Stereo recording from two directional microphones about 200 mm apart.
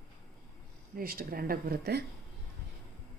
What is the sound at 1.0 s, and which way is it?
A woman's voice, 45° right (ahead or behind).